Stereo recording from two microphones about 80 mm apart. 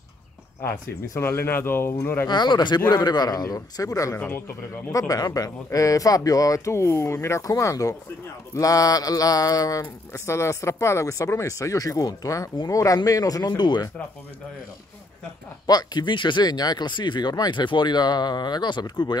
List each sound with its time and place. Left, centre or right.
0.6 s speech: left
2.2 s speech: left
2.9 s speech: left
15.6 s speech: left